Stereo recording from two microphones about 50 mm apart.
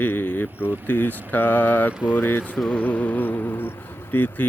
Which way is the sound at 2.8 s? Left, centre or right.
Left.